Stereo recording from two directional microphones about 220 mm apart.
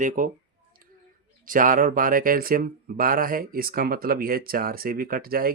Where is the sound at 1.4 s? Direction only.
40° right (ahead or behind).